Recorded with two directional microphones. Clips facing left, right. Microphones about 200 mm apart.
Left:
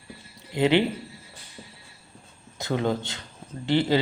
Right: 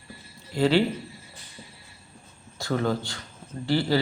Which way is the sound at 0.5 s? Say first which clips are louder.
Even; 20° left (ahead or behind).